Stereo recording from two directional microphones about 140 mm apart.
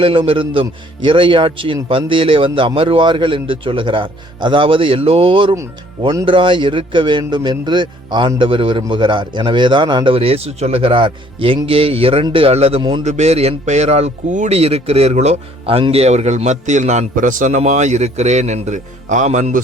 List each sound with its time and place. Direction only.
0.0 s a man's voice: 40° right (ahead or behind); by 19.5 s 60° right (ahead or behind)